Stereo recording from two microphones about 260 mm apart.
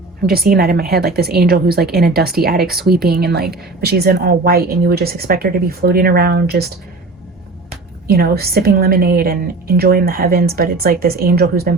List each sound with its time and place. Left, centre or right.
0.2 s a woman's voice: right
8.0 s a woman's voice: right